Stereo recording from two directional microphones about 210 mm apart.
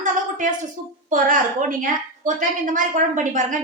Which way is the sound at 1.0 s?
40° right (ahead or behind).